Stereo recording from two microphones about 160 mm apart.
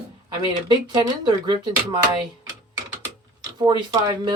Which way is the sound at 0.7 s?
25° right (ahead or behind).